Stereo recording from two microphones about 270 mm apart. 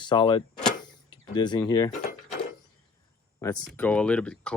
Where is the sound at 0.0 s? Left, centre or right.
Centre.